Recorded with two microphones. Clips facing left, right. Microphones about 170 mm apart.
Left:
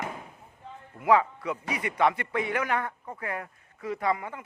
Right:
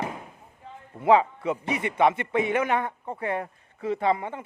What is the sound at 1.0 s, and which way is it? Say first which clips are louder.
A man's voice: right 3 dB; 25° right (ahead or behind).